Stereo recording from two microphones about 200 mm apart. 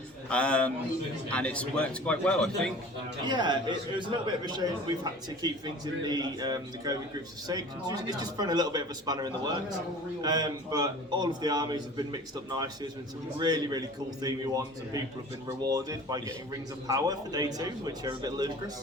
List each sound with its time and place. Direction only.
0.3 s a man's voice: 5° left (ahead or behind)
3.2 s a man's voice: 20° right (ahead or behind)